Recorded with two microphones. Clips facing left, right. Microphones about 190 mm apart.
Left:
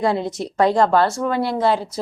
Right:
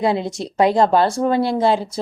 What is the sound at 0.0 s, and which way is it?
A woman's voice, 20° right (ahead or behind).